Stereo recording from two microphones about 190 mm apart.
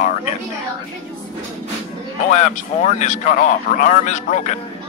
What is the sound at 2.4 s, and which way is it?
Speech, 40° left (ahead or behind).